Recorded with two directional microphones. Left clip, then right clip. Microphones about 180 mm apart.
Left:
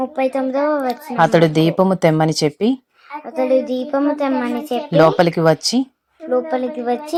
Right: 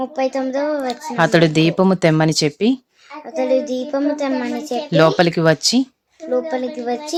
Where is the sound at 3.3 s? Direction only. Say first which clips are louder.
Left 1 dB; 10° left (ahead or behind).